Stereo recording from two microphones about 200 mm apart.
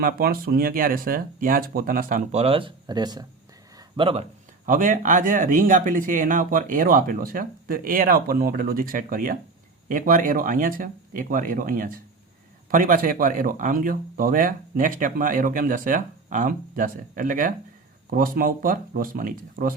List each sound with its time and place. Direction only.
0.0 s speech: 45° right (ahead or behind)